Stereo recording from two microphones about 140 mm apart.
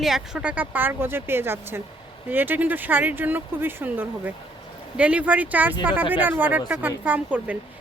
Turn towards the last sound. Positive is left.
turn(degrees=-10)  # may be behind; listen again after turning